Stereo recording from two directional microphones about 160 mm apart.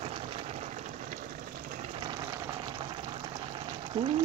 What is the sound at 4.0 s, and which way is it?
Speech, 30° right (ahead or behind).